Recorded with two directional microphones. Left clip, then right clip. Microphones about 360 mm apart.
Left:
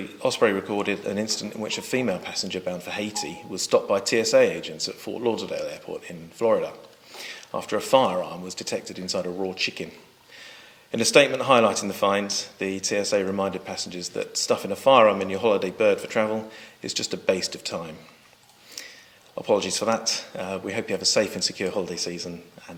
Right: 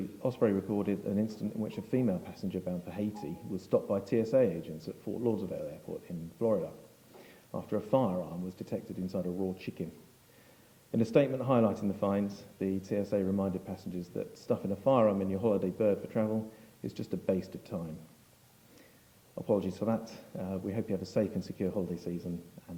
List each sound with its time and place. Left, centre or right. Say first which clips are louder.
0.0 s speech: left 9 dB; centre
9.3 s speech: left 7 dB; centre
9.6 s speech: left 16 dB; centre
10.9 s speech: left 10 dB; centre
19.4 s speech: left 9 dB; centre